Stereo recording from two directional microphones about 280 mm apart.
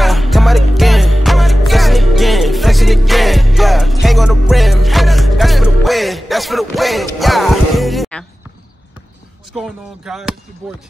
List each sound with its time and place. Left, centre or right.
0.0 s music: centre
9.5 s speech: centre